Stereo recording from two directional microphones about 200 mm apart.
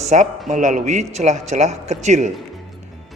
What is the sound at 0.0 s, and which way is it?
A man's voice, 35° right (ahead or behind).